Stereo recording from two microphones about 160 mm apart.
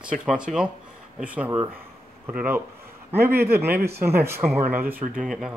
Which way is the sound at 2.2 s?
10° right (ahead or behind).